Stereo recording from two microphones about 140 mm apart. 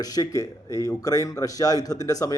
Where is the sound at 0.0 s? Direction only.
25° left (ahead or behind).